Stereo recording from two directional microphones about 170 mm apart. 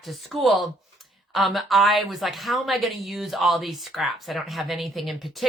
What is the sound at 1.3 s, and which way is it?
Speech, centre (ahead or behind).